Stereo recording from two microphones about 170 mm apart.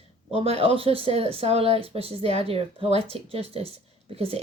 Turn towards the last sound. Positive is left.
turn(degrees=-35)  # may be behind; listen again after turning